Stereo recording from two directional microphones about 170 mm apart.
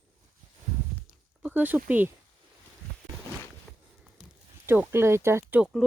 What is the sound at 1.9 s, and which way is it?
Speech, 10° right (ahead or behind).